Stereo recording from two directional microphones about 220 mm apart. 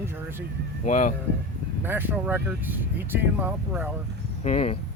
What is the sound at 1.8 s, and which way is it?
Speech, 10° right (ahead or behind).